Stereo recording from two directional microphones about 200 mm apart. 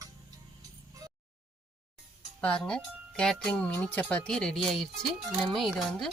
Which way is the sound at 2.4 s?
5° left (ahead or behind).